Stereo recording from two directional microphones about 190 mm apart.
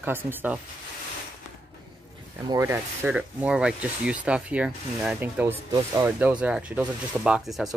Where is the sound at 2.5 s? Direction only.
15° right (ahead or behind).